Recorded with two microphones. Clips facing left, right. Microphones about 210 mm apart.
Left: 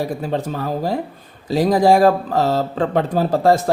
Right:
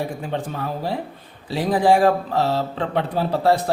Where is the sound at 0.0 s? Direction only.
40° left (ahead or behind).